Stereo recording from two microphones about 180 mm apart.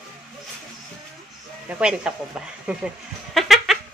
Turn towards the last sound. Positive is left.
turn(degrees=0)  # may be behind; listen again after turning